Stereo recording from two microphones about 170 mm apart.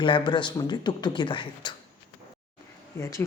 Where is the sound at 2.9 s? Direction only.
15° left (ahead or behind).